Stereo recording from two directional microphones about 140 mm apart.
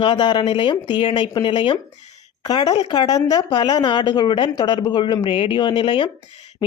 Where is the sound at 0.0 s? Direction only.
35° left (ahead or behind).